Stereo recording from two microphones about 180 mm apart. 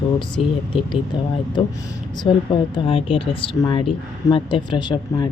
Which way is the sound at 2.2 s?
25° left (ahead or behind).